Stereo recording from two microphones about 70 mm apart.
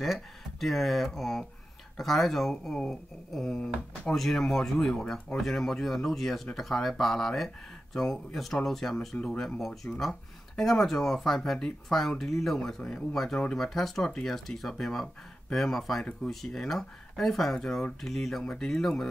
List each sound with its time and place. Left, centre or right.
0.0 s speech: centre
4.1 s speech: centre
9.8 s speech: left
10.5 s speech: centre